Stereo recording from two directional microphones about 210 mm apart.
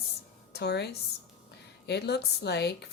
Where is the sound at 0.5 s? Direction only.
50° left (ahead or behind).